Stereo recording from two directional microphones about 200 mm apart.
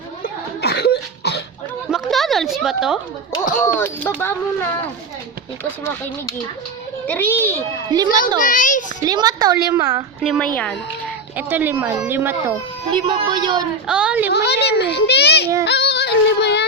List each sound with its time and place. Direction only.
0.6 s cough: 55° left (ahead or behind)
1.9 s a sound: centre (ahead or behind)
3.6 s speech: 10° left (ahead or behind)
7.1 s speech: 10° left (ahead or behind)
7.9 s a woman's voice: 20° right (ahead or behind)
8.4 s a child's voice: 40° left (ahead or behind)
9.0 s a woman's voice: 20° right (ahead or behind)
10.2 s a woman's voice: centre (ahead or behind)
11.3 s speech: 10° right (ahead or behind)
13.1 s a woman's voice: 25° right (ahead or behind)
13.8 s a woman's voice: 5° right (ahead or behind)
14.3 s a child's voice: 55° left (ahead or behind)
15.6 s yodeling: 55° left (ahead or behind)